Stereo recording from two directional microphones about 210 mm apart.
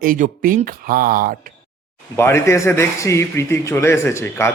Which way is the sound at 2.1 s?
10° left (ahead or behind).